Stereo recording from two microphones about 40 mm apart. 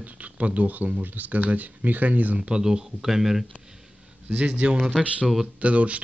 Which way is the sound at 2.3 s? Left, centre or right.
Right.